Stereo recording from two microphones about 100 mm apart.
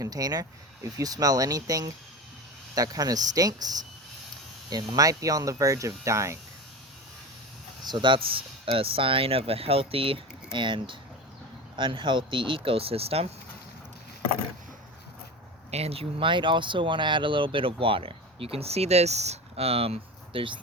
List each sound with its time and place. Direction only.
0.0 s speech: 40° right (ahead or behind)
7.9 s speech: 55° right (ahead or behind)
8.6 s speech: 65° right (ahead or behind); by 13.3 s 85° right
15.7 s speech: 85° right; by 20.6 s 60° right (ahead or behind)